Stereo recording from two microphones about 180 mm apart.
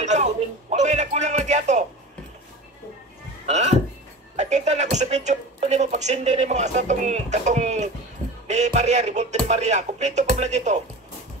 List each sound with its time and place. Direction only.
0.0 s music: 40° right (ahead or behind)
3.4 s a sound: 40° right (ahead or behind)
4.4 s speech: 40° right (ahead or behind)